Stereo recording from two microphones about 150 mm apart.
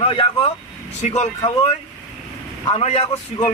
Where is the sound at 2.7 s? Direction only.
45° left (ahead or behind).